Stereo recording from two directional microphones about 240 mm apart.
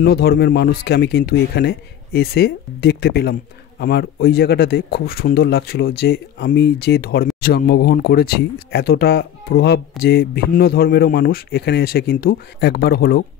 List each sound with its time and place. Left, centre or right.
0.0 s speech: left